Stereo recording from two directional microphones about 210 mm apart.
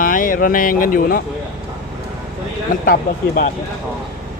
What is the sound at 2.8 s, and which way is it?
Speech, 45° left (ahead or behind).